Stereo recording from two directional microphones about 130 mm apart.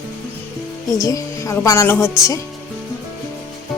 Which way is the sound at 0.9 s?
25° left (ahead or behind).